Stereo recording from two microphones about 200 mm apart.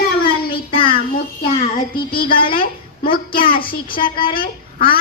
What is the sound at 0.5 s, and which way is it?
Child singing, 25° left (ahead or behind).